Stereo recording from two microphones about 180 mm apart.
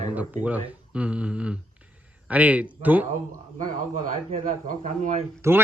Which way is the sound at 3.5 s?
45° right (ahead or behind).